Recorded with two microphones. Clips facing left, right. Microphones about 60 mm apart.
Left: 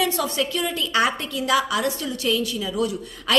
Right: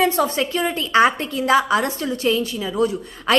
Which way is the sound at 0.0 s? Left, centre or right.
Right.